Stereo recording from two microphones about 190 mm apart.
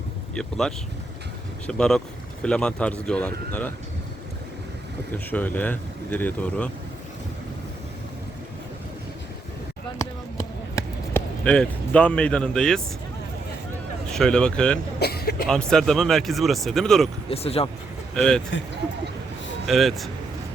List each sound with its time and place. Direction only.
0.3 s speech: centre (ahead or behind)
5.1 s speech: 10° left (ahead or behind)
10.0 s basketball bounce: 15° left (ahead or behind)
11.4 s speech: 5° left (ahead or behind)
14.1 s speech: 5° left (ahead or behind)
14.9 s cough: 55° left (ahead or behind)
15.4 s speech: 5° left (ahead or behind)
17.2 s speech: 30° left (ahead or behind)
18.1 s speech: 5° left (ahead or behind)
19.6 s speech: centre (ahead or behind)